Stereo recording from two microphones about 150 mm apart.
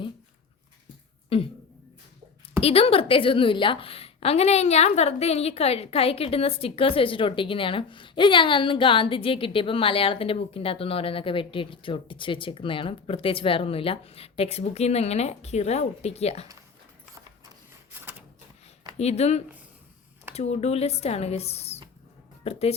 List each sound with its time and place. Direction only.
1.3 s a woman's voice: 40° left (ahead or behind)
2.6 s a woman's voice: 40° left (ahead or behind)
18.9 s speech: 45° left (ahead or behind)